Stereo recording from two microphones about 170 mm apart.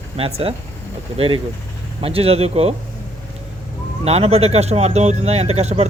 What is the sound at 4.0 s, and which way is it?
Speech, 35° right (ahead or behind).